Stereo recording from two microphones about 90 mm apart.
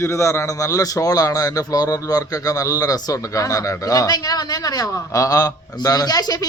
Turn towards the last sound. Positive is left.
turn(degrees=45)  # may be behind; listen again after turning